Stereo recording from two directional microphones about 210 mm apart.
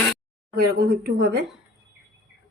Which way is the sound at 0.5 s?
45° right (ahead or behind).